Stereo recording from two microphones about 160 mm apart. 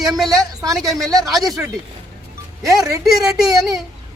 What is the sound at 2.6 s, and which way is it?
Speech, 20° right (ahead or behind).